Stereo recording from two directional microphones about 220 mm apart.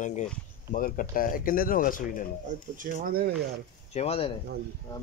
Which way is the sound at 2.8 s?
40° right (ahead or behind).